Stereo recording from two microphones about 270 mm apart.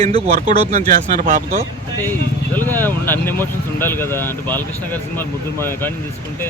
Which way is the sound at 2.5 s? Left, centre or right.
Centre.